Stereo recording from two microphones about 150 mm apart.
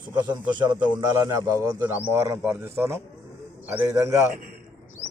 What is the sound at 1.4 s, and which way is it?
A man's voice, 15° right (ahead or behind).